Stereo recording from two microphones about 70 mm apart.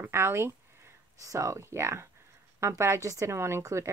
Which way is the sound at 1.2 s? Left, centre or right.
Right.